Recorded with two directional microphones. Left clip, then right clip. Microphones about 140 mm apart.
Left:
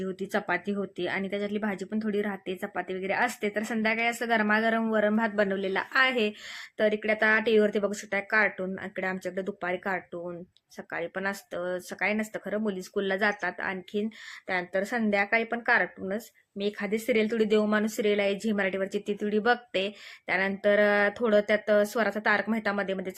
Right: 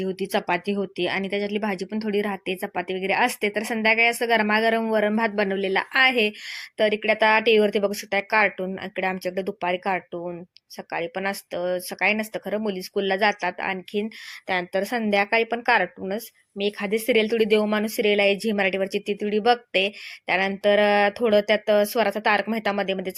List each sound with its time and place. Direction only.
0.0 s speech: 20° right (ahead or behind)